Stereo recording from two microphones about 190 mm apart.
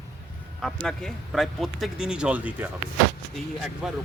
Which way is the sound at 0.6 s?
5° left (ahead or behind).